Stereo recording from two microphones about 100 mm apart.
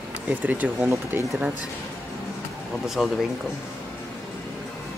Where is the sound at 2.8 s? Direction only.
5° right (ahead or behind).